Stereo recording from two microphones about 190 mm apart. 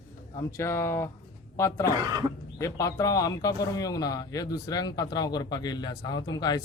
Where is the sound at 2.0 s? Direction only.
20° right (ahead or behind).